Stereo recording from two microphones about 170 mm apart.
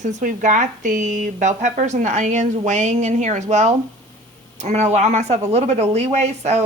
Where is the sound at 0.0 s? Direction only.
45° right (ahead or behind).